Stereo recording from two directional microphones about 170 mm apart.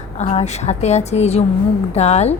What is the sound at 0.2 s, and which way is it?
A woman's voice, 40° left (ahead or behind).